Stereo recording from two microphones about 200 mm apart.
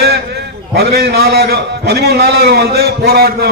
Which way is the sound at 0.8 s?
55° right (ahead or behind).